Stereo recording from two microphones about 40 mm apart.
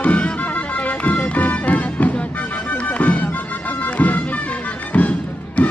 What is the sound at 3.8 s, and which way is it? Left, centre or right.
Music, left.